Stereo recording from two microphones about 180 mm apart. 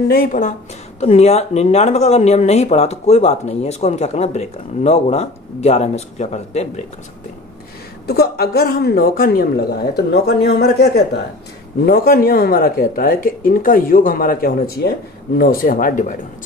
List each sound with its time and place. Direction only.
0.1 s speech: 50° left (ahead or behind)
0.9 s speech: 35° left (ahead or behind)
8.1 s a woman's voice: 60° left (ahead or behind)